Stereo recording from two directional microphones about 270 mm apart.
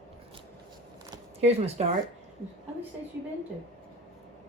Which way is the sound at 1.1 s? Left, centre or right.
Right.